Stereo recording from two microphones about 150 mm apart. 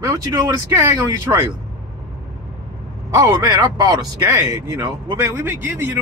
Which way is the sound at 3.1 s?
25° right (ahead or behind).